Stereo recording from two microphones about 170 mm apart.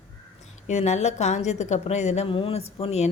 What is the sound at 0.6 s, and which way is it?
A woman's voice, 40° left (ahead or behind).